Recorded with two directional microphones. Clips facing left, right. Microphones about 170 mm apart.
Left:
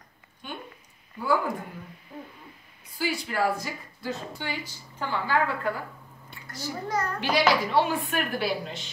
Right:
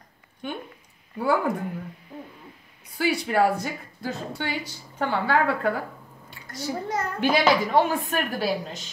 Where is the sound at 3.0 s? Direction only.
65° right (ahead or behind).